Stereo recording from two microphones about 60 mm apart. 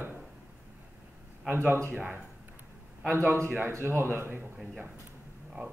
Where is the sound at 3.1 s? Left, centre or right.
Right.